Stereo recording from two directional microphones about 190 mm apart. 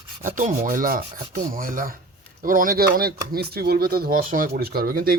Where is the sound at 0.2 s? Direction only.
45° right (ahead or behind).